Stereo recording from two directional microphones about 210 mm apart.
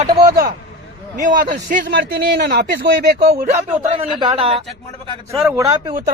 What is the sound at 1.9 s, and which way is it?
Speech, 55° right (ahead or behind).